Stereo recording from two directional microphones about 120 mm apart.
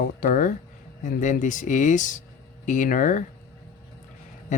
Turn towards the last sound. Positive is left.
turn(degrees=90)